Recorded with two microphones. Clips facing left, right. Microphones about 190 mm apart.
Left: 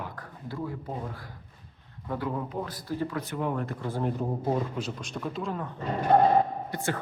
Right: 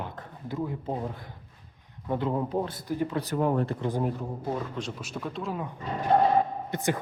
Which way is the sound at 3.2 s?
40° right (ahead or behind).